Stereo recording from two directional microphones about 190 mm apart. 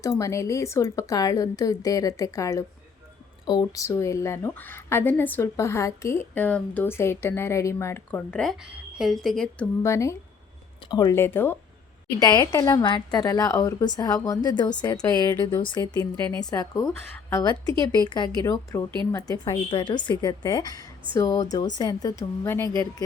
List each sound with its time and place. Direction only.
0.0 s speech: 15° left (ahead or behind)
9.8 s a woman's voice: 15° left (ahead or behind)
16.1 s speech: 10° left (ahead or behind)
16.4 s a woman's voice: 20° left (ahead or behind)